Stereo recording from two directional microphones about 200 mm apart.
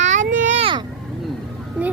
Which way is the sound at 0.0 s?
40° right (ahead or behind).